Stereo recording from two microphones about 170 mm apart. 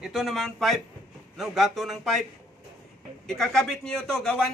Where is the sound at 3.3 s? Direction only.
5° left (ahead or behind).